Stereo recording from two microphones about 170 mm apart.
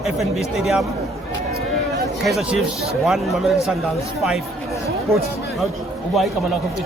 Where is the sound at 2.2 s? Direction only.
Centre (ahead or behind).